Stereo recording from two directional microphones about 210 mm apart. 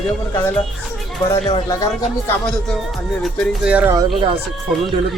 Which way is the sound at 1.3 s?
15° left (ahead or behind).